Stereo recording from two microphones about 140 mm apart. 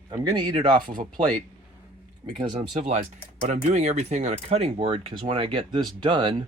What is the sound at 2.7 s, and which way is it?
Speech, 50° right (ahead or behind).